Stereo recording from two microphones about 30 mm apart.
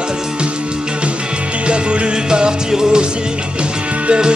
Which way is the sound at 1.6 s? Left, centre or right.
Right.